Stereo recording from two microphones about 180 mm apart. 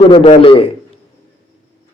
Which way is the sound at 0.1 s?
30° left (ahead or behind).